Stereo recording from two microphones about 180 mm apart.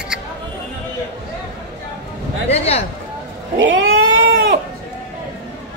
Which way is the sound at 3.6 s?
90° right.